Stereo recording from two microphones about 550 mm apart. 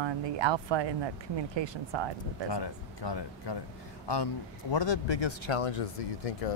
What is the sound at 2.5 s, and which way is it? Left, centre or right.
A man's voice, left.